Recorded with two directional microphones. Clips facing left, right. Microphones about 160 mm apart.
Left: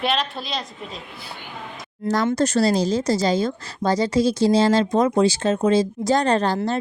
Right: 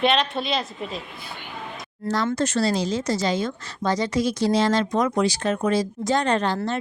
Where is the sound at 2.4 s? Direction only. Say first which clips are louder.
Left 4 dB; 40° left (ahead or behind).